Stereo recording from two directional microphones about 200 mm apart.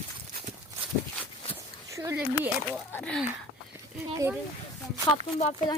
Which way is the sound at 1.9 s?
15° right (ahead or behind).